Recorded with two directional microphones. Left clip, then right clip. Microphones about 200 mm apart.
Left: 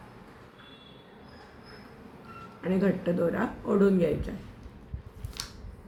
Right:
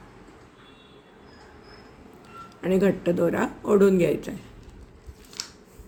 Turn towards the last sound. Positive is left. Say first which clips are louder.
# right 5 dB
turn(degrees=-50)  # may be behind; listen again after turning